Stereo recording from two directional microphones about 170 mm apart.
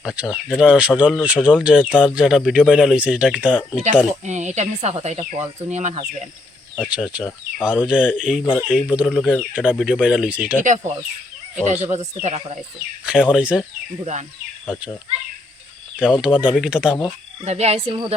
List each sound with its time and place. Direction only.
0.0 s speech: 5° right (ahead or behind)
4.3 s speech: 45° right (ahead or behind)
6.8 s speech: 5° right (ahead or behind)
11.6 s speech: 45° right (ahead or behind)
13.1 s speech: 5° right (ahead or behind)
14.0 s speech: 45° right (ahead or behind)
14.7 s speech: 5° right (ahead or behind)
16.0 s speech: 5° right (ahead or behind)
17.4 s speech: 40° right (ahead or behind)